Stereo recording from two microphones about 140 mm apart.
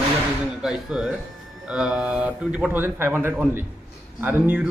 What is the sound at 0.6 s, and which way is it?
A man's voice, 5° right (ahead or behind).